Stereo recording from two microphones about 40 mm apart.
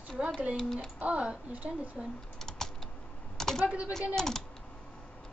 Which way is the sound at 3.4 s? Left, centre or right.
Centre.